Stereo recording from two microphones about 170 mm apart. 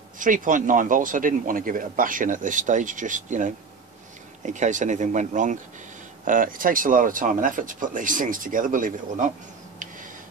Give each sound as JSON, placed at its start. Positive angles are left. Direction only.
{"t": 0.2, "sound": "speech", "side_deg": -50}